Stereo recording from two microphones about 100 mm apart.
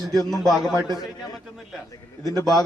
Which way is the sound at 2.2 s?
35° left (ahead or behind).